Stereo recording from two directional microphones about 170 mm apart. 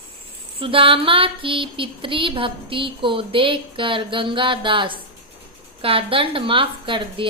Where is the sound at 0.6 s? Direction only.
30° right (ahead or behind).